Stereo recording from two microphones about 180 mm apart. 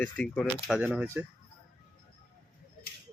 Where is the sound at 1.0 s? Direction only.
15° right (ahead or behind).